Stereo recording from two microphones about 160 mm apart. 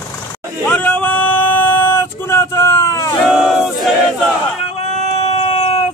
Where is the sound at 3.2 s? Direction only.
Centre (ahead or behind).